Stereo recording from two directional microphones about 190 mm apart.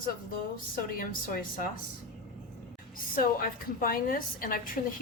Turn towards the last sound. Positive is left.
turn(degrees=50)  # may be behind; listen again after turning